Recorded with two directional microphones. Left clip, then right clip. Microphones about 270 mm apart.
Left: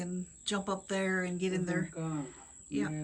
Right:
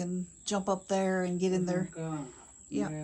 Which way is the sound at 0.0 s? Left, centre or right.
Centre.